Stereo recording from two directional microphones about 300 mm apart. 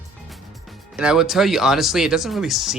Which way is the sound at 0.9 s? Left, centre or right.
Centre.